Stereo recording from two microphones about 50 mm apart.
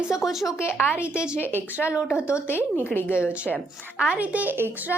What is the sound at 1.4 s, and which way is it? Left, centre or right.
Speech, right.